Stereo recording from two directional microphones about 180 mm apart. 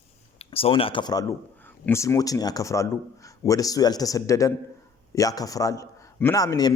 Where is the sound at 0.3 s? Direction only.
30° left (ahead or behind).